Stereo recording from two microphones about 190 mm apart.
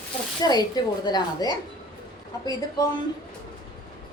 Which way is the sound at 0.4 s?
20° left (ahead or behind).